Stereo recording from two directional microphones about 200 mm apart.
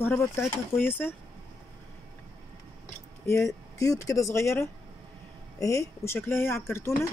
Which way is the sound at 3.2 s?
15° left (ahead or behind).